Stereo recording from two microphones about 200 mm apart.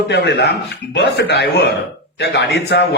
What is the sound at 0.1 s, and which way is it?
A man's voice, 55° left (ahead or behind).